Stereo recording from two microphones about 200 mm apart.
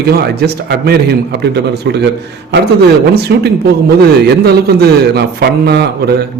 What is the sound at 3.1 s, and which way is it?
A man's voice, 55° right (ahead or behind).